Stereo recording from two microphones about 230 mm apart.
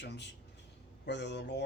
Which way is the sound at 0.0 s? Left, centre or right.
Left.